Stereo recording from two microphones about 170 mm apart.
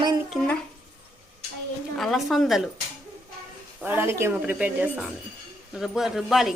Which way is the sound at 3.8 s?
10° right (ahead or behind).